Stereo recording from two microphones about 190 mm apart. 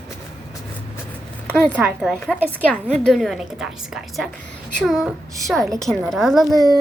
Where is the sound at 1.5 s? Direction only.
5° left (ahead or behind).